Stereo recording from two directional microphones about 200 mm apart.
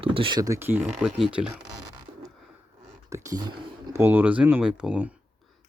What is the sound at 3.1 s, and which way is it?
Speech, 20° right (ahead or behind).